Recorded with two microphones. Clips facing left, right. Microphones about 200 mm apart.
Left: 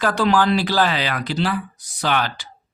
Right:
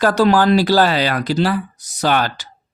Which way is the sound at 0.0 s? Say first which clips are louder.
Right 5 dB; 40° right (ahead or behind).